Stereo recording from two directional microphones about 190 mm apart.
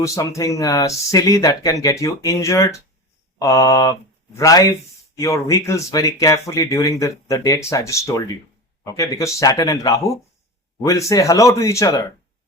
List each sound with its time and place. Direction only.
0.0 s speech: 15° left (ahead or behind)